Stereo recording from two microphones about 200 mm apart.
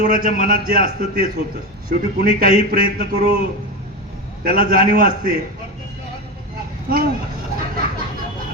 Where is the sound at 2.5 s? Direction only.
30° left (ahead or behind).